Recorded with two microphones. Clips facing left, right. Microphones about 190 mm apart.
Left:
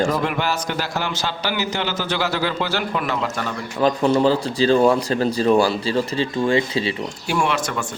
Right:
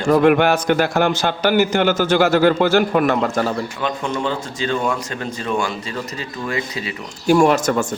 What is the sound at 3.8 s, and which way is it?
Speech, 35° left (ahead or behind).